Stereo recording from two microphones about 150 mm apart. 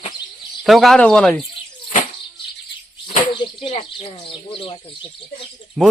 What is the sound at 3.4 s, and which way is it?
Speech, 35° left (ahead or behind).